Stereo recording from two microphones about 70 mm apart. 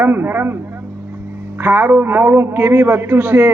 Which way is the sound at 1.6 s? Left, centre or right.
Right.